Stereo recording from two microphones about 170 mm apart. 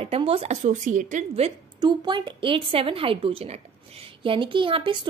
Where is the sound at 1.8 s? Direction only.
25° right (ahead or behind).